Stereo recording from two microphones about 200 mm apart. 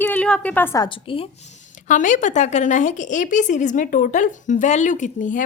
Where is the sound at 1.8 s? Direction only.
40° left (ahead or behind).